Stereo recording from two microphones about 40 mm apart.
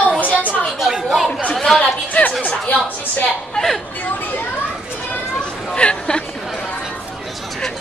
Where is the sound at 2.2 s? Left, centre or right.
Left.